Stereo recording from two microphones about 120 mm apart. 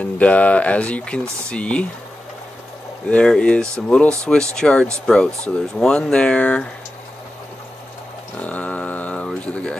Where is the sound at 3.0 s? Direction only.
5° left (ahead or behind).